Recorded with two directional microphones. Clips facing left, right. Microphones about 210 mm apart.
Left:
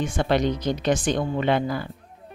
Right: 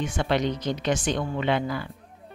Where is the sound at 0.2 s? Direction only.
45° left (ahead or behind).